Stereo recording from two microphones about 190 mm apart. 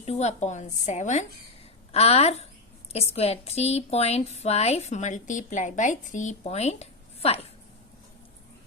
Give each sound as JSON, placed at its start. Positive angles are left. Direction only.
{"t": 0.0, "sound": "speech", "side_deg": 35}